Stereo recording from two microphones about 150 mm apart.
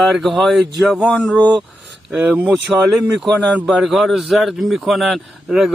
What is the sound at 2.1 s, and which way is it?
A man's voice, 10° right (ahead or behind).